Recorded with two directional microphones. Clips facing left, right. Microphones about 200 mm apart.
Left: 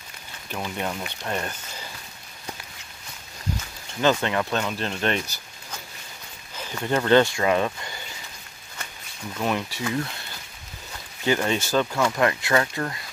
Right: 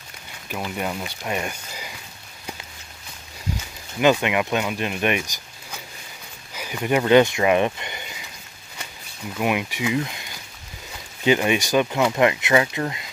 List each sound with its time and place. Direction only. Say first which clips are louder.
0.5 s speech: right 2 dB; 5° right (ahead or behind)
4.0 s speech: right 3 dB; 15° right (ahead or behind)
9.4 s speech: right 3 dB; 10° right (ahead or behind)